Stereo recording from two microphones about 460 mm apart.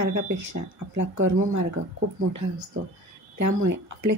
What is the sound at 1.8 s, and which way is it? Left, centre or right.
Speech, right.